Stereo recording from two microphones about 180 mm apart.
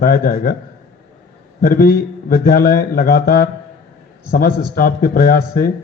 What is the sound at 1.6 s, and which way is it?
A man's voice, 55° left (ahead or behind).